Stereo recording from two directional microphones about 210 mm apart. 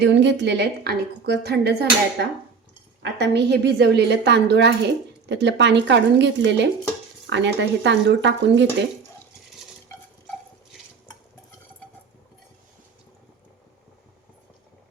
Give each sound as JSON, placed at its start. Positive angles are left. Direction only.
{"t": 0.0, "sound": "a woman's voice", "side_deg": -55}